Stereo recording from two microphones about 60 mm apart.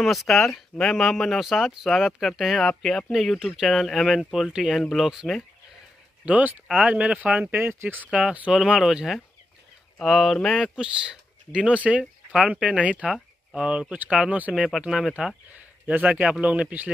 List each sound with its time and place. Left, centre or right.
0.0 s speech: centre
1.4 s speech: centre
3.3 s speech: centre
3.6 s speech: centre
6.2 s a man's voice: right
7.5 s speech: right
8.1 s speech: centre
8.8 s speech: centre
10.8 s a man's voice: centre
15.5 s a man's voice: right